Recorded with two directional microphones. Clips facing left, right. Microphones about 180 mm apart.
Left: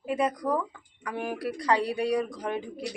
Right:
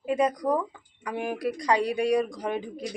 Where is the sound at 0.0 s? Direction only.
15° right (ahead or behind).